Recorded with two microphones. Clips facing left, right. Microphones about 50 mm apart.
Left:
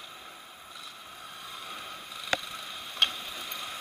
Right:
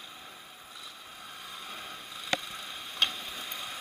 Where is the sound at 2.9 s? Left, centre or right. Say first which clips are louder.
Left 2 dB; left.